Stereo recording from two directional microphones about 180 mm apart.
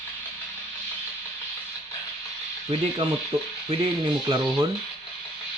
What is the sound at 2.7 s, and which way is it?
Speech, 25° right (ahead or behind).